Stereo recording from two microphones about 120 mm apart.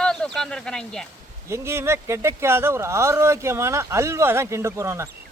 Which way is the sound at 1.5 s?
20° right (ahead or behind).